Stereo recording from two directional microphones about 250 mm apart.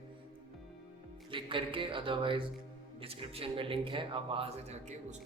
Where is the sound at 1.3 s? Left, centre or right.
Centre.